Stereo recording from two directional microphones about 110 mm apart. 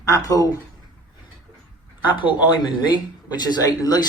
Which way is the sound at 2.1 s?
45° left (ahead or behind).